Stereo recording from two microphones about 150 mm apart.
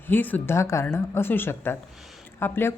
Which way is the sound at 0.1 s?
10° left (ahead or behind).